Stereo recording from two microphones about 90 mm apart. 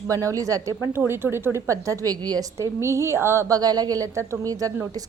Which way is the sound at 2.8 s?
30° right (ahead or behind).